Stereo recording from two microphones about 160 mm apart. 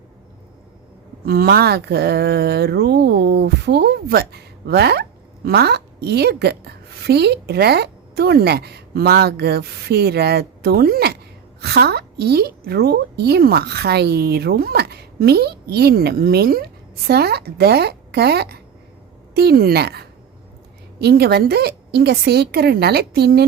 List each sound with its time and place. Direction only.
1.2 s a woman's voice: 75° right (ahead or behind)
11.6 s a woman's voice: 90° right; by 16.6 s 75° right (ahead or behind)
17.1 s a woman's voice: 85° right